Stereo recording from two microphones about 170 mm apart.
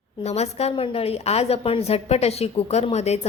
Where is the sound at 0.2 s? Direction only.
40° left (ahead or behind).